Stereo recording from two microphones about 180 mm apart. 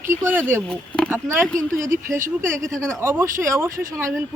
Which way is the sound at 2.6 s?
5° left (ahead or behind).